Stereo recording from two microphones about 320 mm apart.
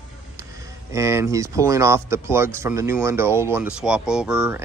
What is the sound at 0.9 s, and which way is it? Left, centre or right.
A man's voice, centre.